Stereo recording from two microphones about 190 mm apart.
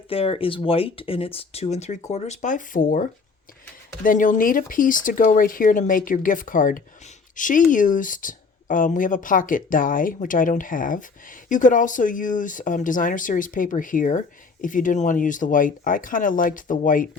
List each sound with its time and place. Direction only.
0.1 s speech: 30° left (ahead or behind); by 17.1 s 45° left (ahead or behind)